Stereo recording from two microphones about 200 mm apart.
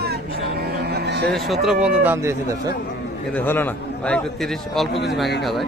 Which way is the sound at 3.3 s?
10° left (ahead or behind).